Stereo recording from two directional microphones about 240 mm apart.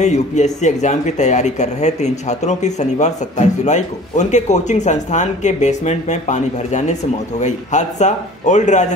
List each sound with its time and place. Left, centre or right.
0.0 s speech: left